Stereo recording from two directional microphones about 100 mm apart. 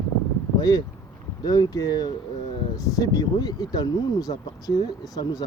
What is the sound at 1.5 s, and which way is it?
Speech, 40° left (ahead or behind).